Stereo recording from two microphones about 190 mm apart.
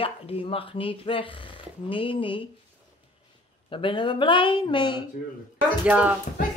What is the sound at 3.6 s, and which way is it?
A woman's voice, 25° left (ahead or behind).